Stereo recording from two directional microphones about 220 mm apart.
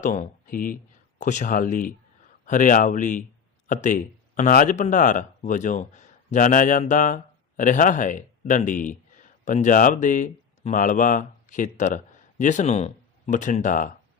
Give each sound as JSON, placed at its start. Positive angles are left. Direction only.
{"t": 0.0, "sound": "speech", "side_deg": 35}